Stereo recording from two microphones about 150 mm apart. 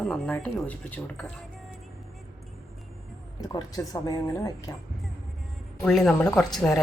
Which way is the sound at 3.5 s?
25° left (ahead or behind).